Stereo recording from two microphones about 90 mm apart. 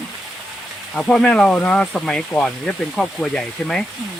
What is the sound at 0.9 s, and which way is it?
Speech, 10° left (ahead or behind).